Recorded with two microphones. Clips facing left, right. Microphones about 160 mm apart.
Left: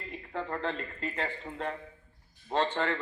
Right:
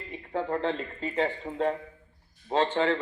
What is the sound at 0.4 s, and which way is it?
Speech, 30° right (ahead or behind).